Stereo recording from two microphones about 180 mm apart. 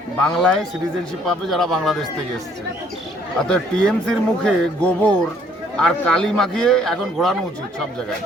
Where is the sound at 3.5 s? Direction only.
5° left (ahead or behind).